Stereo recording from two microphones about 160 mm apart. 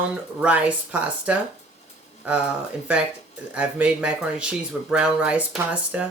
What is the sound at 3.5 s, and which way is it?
Speech, 5° right (ahead or behind).